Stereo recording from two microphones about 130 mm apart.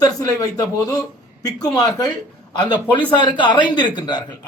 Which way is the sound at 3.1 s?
35° left (ahead or behind).